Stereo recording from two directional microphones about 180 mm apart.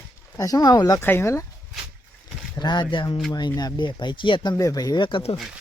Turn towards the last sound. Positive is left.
turn(degrees=25)  # may be behind; listen again after turning